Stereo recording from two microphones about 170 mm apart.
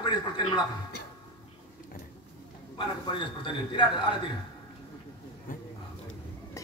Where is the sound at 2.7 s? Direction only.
30° left (ahead or behind).